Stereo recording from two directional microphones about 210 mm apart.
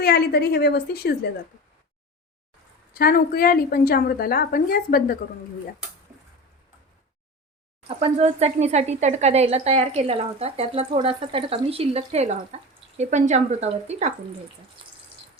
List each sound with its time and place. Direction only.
0.0 s a woman's voice: 50° left (ahead or behind)
2.9 s a woman's voice: 45° left (ahead or behind)
7.9 s speech: 30° right (ahead or behind)